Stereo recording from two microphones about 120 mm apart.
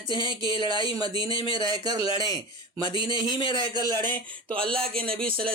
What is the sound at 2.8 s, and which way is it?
Speech, 40° left (ahead or behind).